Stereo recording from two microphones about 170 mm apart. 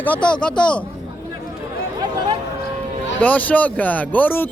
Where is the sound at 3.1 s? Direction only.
10° left (ahead or behind).